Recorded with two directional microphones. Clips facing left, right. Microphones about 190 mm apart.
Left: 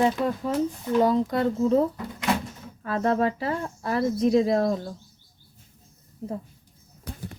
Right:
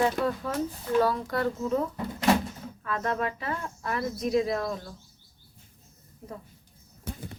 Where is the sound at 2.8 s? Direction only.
30° left (ahead or behind).